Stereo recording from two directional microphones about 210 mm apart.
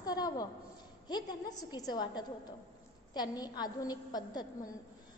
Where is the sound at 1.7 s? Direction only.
20° left (ahead or behind).